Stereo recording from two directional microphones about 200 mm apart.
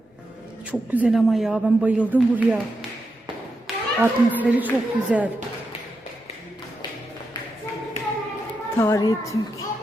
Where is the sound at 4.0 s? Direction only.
10° right (ahead or behind).